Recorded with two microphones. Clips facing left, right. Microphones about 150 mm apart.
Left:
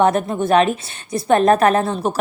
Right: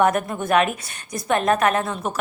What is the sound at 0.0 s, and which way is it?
A woman's voice, 30° left (ahead or behind).